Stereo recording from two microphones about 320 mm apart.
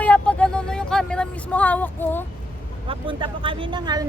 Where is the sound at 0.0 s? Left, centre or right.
Centre.